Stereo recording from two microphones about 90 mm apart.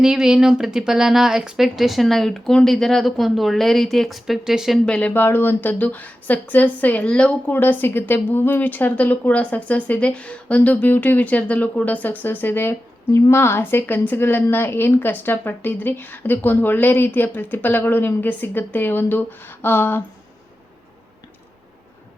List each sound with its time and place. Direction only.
0.0 s speech: 5° right (ahead or behind)
4.9 s speech: 15° left (ahead or behind)